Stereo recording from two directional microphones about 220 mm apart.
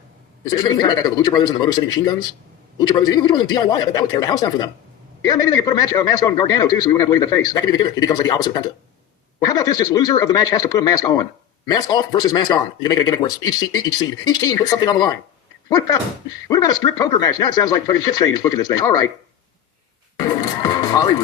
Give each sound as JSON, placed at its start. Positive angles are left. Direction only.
{"t": 0.4, "sound": "a man's voice", "side_deg": 15}
{"t": 16.5, "sound": "a man's voice", "side_deg": 15}
{"t": 20.1, "sound": "music", "side_deg": 20}